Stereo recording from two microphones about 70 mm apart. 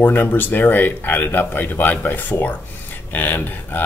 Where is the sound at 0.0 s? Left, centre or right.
Left.